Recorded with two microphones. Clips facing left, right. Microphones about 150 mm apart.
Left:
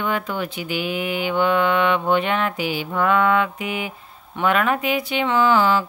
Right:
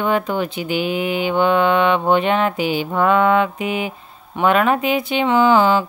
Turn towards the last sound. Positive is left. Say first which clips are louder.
# right 3 dB
turn(degrees=-20)  # may be behind; listen again after turning